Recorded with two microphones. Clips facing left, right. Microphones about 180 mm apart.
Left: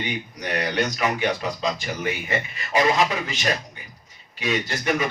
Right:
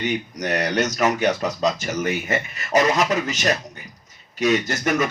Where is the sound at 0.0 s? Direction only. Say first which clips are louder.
Right 5 dB; 45° right (ahead or behind).